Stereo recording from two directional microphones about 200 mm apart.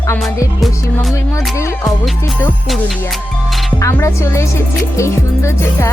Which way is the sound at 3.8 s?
15° left (ahead or behind).